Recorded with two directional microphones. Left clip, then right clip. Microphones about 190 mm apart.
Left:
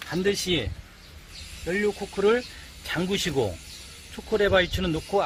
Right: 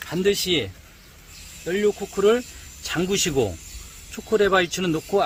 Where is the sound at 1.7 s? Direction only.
65° right (ahead or behind).